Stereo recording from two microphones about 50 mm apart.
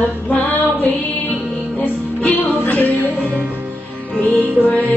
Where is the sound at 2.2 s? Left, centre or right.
Left.